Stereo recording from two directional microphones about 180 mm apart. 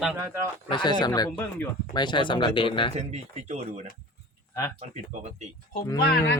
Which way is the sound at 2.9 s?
35° right (ahead or behind).